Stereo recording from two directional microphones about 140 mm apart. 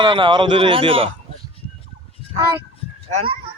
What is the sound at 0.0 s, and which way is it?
A child's voice, 35° right (ahead or behind).